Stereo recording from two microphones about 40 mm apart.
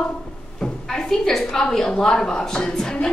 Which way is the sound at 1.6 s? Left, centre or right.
Centre.